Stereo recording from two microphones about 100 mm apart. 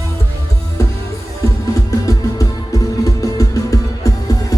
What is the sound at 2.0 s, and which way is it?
Music, 35° left (ahead or behind).